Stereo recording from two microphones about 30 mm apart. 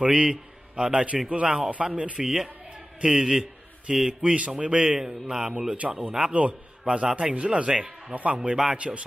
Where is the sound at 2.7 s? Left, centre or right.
Right.